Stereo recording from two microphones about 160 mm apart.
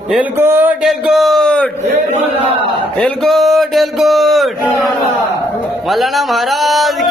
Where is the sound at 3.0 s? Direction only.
5° left (ahead or behind).